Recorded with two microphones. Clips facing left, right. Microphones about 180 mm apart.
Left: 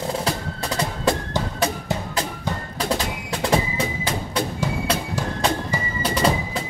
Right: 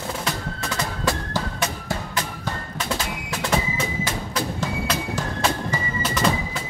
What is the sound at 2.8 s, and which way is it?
Music, 30° left (ahead or behind).